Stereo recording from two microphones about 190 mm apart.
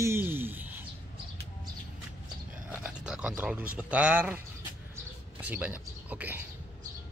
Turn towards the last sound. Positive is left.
turn(degrees=-10)  # may be behind; listen again after turning